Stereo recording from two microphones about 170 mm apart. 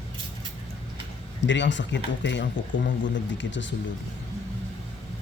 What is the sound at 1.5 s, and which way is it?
A man's voice, 90° left.